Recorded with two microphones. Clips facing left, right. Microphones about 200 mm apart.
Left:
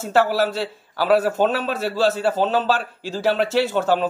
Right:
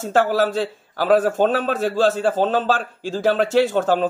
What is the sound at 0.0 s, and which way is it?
A man's voice, 45° right (ahead or behind).